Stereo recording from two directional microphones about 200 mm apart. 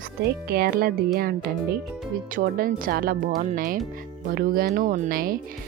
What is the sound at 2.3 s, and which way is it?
Speech, 45° right (ahead or behind).